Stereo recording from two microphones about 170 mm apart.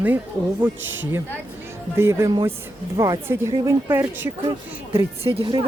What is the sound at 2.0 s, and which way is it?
A woman's voice, 15° right (ahead or behind).